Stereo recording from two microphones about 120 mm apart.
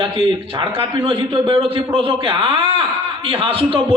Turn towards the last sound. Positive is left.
turn(degrees=-45)  # may be behind; listen again after turning